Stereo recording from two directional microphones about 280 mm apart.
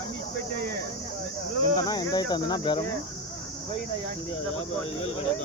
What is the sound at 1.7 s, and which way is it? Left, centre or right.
Speech, centre.